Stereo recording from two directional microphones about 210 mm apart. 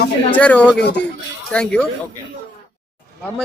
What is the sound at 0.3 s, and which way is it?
Speech, 5° left (ahead or behind).